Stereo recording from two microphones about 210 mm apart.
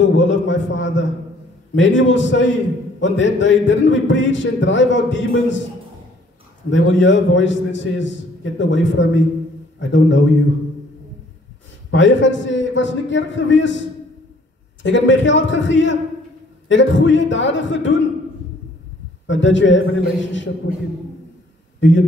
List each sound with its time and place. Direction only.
0.0 s speech: 60° left (ahead or behind)
1.8 s speech: 60° left (ahead or behind)
6.7 s speech: 60° left (ahead or behind)
11.9 s speech: 60° left (ahead or behind)
19.2 s speech: 60° left (ahead or behind)
21.7 s speech: 60° left (ahead or behind)